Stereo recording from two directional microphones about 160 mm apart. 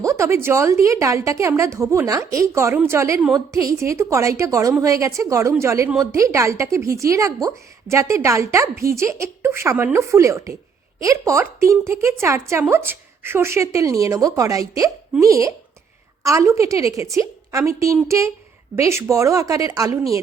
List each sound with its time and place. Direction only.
0.0 s a woman's voice: 20° right (ahead or behind)